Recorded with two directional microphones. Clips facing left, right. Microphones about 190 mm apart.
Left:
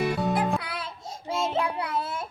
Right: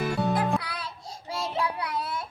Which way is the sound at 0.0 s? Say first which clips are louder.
Left 1 dB; centre (ahead or behind).